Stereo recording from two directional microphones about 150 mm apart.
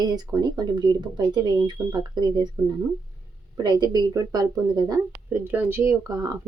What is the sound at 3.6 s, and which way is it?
Speech, 25° right (ahead or behind).